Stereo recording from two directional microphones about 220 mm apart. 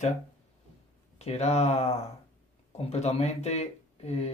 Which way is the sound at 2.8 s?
30° left (ahead or behind).